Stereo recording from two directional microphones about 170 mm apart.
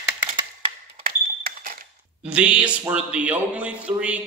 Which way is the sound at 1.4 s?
60° right (ahead or behind).